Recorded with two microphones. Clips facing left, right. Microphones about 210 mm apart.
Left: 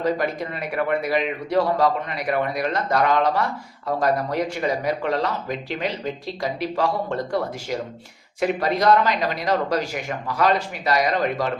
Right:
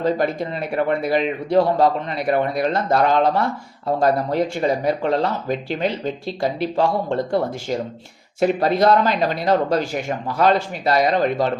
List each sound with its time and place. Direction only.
0.0 s speech: 30° right (ahead or behind)
6.7 s speech: 25° right (ahead or behind)